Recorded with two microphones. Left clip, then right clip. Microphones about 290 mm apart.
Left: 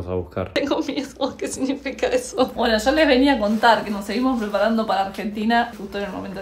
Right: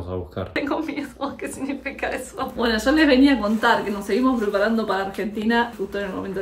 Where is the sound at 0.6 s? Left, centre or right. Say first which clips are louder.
Left 2 dB; centre.